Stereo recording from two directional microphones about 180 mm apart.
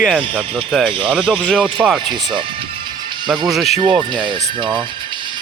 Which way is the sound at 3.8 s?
25° right (ahead or behind).